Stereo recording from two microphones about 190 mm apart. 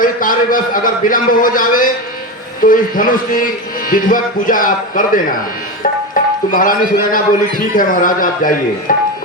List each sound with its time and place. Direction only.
0.0 s speech: 45° left (ahead or behind)